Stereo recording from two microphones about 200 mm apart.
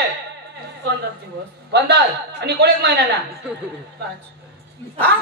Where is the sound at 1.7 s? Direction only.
55° right (ahead or behind).